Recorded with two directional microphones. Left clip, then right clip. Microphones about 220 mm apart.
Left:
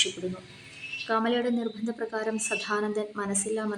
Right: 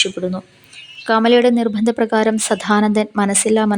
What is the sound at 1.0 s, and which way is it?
A woman's voice, 45° right (ahead or behind).